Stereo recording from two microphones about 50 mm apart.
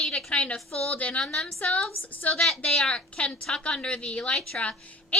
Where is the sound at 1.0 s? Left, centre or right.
Left.